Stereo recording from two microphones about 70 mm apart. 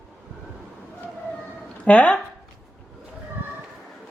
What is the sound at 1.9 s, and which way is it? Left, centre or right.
Speech, centre.